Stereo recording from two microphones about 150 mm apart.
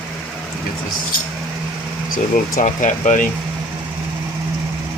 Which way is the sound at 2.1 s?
60° left (ahead or behind).